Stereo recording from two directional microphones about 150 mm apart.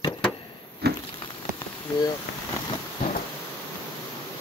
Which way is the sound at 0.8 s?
90° right.